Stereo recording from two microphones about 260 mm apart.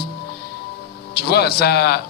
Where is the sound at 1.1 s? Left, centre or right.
Left.